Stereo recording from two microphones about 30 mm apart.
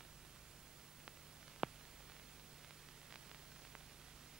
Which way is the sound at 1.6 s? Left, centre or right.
Right.